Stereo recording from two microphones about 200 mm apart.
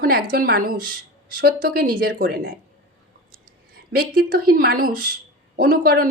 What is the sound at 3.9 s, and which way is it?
A woman's voice, 50° right (ahead or behind).